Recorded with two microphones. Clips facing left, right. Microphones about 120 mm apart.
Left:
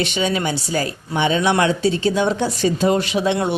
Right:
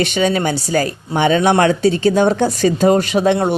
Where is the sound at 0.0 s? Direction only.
50° right (ahead or behind).